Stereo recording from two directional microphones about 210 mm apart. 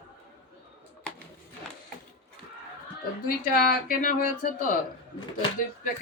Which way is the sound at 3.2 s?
45° left (ahead or behind).